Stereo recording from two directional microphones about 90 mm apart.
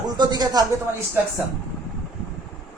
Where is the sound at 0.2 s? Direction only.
50° right (ahead or behind).